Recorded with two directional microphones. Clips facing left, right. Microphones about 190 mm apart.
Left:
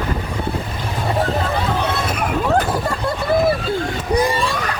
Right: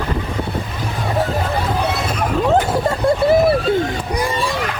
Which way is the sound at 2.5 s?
25° right (ahead or behind).